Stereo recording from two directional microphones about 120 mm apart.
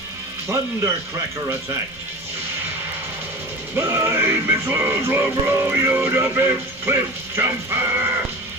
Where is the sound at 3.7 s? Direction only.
25° right (ahead or behind).